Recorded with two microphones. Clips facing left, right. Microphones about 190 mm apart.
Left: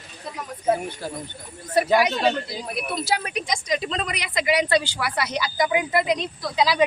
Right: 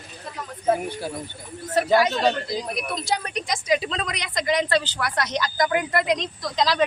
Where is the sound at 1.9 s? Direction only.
10° left (ahead or behind).